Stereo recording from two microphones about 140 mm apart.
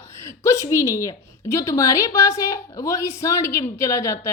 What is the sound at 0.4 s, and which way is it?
A woman's voice, 20° left (ahead or behind).